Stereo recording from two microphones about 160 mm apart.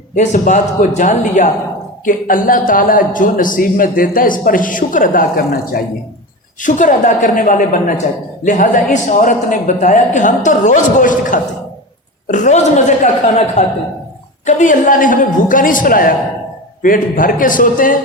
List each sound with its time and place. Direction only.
0.1 s a man's voice: 50° left (ahead or behind)
6.6 s a man's voice: 55° left (ahead or behind)